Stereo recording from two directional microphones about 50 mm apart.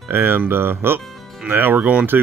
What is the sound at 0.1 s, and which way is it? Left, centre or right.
Speech, right.